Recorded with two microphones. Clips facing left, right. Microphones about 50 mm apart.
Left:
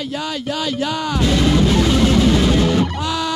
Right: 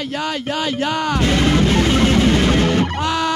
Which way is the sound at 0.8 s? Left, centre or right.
Right.